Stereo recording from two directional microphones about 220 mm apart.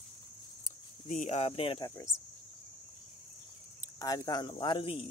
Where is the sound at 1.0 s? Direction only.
35° left (ahead or behind).